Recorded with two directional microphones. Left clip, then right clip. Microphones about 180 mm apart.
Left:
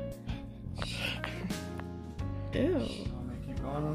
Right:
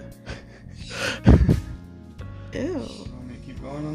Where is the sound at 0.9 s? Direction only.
50° right (ahead or behind).